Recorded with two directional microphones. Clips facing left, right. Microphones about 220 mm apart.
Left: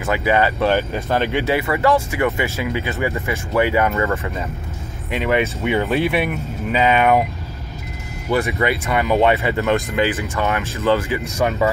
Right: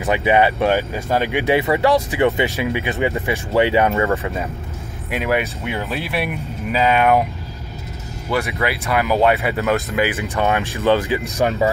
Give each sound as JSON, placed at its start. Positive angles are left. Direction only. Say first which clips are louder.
{"t": 0.0, "sound": "speech", "louder": "right 2 dB", "side_deg": -20}
{"t": 8.4, "sound": "speech", "louder": "left 2 dB", "side_deg": 0}